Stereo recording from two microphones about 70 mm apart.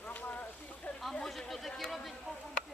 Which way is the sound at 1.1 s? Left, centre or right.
Centre.